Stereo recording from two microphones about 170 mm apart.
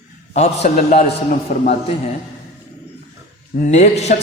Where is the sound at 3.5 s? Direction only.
45° left (ahead or behind).